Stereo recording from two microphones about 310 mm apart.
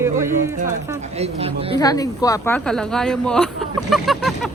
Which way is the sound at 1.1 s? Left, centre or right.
Centre.